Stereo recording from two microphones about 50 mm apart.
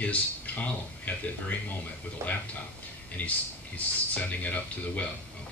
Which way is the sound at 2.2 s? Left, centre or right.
Right.